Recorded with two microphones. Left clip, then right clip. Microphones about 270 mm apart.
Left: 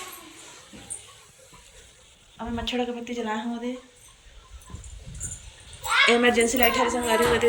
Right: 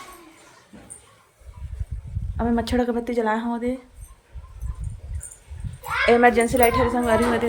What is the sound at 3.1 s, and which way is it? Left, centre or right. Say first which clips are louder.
Speech: right 8 dB; centre.